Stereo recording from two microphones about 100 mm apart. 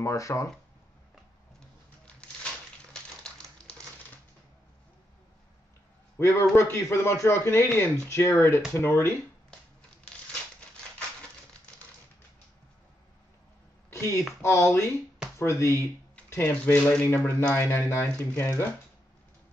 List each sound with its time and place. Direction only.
0.0 s speech: 30° left (ahead or behind)
2.9 s typewriter: 10° left (ahead or behind)
6.1 s a man's voice: 25° left (ahead or behind)
13.9 s a man's voice: 25° left (ahead or behind)
16.7 s speech: 10° left (ahead or behind)
17.0 s a man's voice: 25° left (ahead or behind)